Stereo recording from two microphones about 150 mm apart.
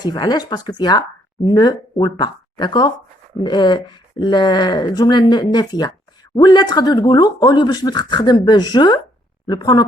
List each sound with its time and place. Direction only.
0.0 s speech: 30° left (ahead or behind)